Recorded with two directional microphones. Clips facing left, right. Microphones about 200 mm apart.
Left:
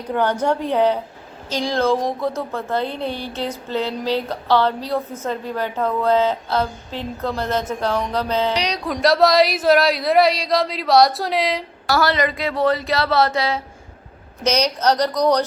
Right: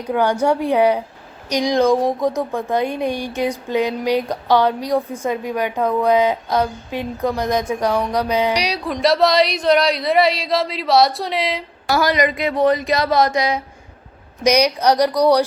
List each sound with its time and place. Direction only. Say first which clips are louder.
0.1 s speech: right 2 dB; 10° right (ahead or behind)
11.9 s speech: right 2 dB; 15° right (ahead or behind)